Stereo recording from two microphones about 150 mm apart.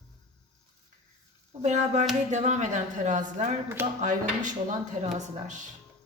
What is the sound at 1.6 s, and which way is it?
Speech, 55° right (ahead or behind).